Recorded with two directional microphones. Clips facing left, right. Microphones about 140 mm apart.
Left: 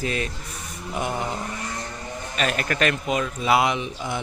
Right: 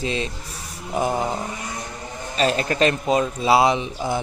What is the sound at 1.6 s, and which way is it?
Vehicle, 15° right (ahead or behind).